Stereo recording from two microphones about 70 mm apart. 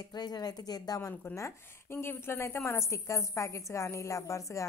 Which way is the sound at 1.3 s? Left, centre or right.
Left.